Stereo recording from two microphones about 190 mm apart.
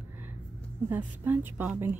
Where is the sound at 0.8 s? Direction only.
10° right (ahead or behind).